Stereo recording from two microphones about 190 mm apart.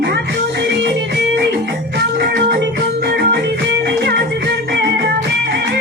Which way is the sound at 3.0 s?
55° right (ahead or behind).